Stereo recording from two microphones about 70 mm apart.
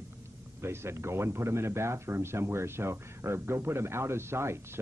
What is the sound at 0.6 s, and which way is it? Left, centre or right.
Speech, right.